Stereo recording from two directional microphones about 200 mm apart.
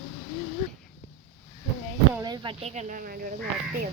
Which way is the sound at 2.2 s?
25° right (ahead or behind).